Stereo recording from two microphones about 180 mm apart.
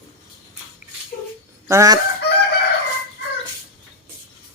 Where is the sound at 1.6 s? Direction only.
20° right (ahead or behind).